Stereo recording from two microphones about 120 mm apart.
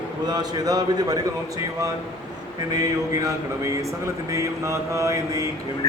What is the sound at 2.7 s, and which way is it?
A man's voice, 30° right (ahead or behind).